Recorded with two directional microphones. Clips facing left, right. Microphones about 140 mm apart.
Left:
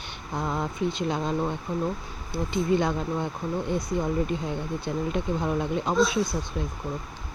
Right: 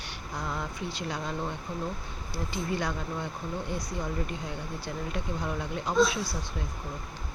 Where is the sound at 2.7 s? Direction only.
25° left (ahead or behind).